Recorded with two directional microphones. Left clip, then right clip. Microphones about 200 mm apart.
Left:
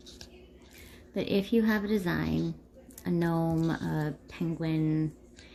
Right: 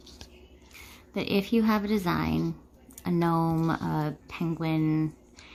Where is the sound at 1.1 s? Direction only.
25° right (ahead or behind).